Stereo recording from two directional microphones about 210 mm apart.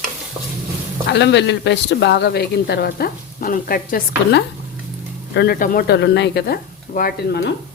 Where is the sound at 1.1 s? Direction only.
55° left (ahead or behind).